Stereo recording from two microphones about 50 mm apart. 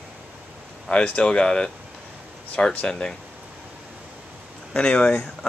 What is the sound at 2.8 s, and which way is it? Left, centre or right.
Speech, centre.